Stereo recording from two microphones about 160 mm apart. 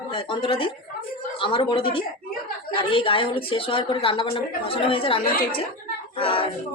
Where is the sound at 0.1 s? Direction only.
30° left (ahead or behind).